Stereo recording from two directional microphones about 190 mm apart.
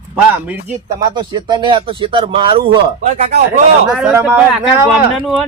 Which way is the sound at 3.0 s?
40° right (ahead or behind).